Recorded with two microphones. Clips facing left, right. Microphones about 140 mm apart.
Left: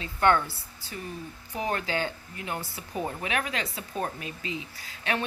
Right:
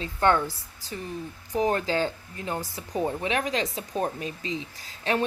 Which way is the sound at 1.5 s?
35° right (ahead or behind).